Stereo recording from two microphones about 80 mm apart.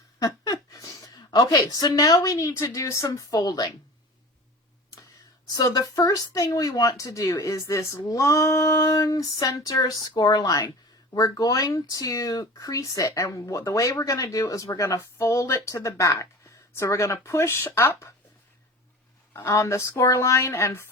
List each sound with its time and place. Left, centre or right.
0.2 s a sound: left
1.1 s speech: left
3.3 s a woman's voice: left
5.5 s speech: left
19.4 s speech: left